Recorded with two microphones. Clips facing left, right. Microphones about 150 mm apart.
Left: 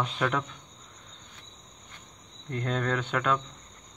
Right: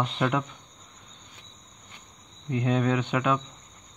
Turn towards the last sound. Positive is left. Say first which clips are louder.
# right 3 dB
turn(degrees=-10)  # may be behind; listen again after turning